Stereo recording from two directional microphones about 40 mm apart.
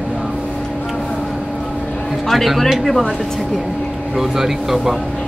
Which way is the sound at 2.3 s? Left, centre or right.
Centre.